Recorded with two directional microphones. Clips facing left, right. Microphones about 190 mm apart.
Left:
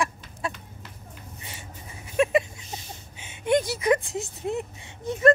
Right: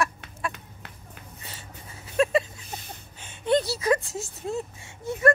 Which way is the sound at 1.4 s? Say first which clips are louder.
Left 1 dB; 10° left (ahead or behind).